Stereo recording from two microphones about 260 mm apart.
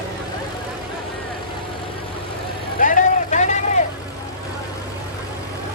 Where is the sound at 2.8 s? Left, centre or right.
Left.